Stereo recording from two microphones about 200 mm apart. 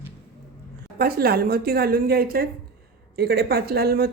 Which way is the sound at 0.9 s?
50° right (ahead or behind).